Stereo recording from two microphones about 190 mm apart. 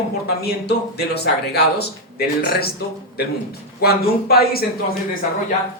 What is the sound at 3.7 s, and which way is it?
Speech, 55° left (ahead or behind).